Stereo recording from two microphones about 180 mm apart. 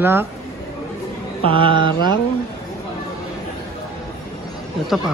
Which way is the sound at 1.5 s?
30° right (ahead or behind).